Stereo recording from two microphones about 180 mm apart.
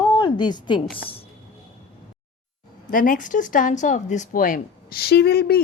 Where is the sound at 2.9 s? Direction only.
50° left (ahead or behind).